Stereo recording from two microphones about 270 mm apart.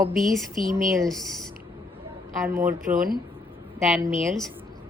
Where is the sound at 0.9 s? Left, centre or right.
Centre.